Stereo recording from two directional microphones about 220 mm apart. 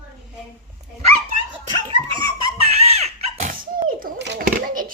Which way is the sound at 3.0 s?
35° right (ahead or behind).